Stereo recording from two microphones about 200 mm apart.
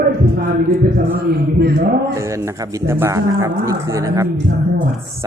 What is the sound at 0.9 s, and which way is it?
Speech, 50° right (ahead or behind).